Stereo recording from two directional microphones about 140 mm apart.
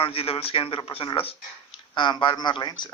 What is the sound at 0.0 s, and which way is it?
Speech, 45° left (ahead or behind).